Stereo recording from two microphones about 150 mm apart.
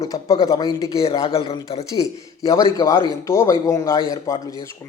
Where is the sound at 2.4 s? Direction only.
25° left (ahead or behind).